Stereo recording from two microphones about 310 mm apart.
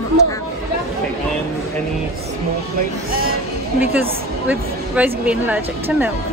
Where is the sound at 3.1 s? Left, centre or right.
Right.